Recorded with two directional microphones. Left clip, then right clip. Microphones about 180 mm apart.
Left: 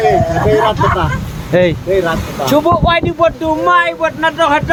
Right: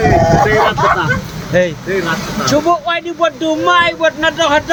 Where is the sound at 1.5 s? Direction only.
35° left (ahead or behind).